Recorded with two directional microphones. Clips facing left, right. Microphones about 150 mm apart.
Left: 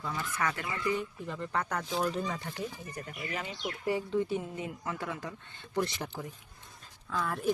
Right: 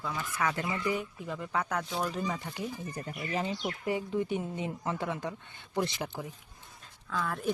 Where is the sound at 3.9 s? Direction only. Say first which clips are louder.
Left 1 dB; 20° right (ahead or behind).